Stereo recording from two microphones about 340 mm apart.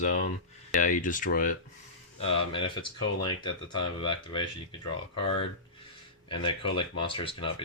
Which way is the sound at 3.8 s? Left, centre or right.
Centre.